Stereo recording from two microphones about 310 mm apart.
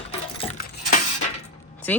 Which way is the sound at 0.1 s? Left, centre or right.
Centre.